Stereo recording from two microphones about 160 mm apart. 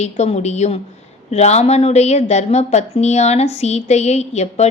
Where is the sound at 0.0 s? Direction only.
45° left (ahead or behind).